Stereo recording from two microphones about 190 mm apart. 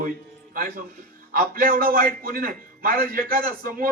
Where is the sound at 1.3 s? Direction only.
50° right (ahead or behind).